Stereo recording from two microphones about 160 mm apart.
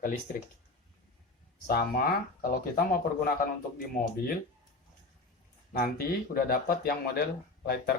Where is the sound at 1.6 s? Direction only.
80° left.